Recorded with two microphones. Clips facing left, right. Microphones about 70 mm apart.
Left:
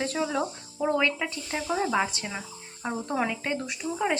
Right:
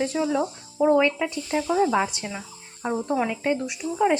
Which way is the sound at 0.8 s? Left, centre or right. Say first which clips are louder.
Right 6 dB; centre.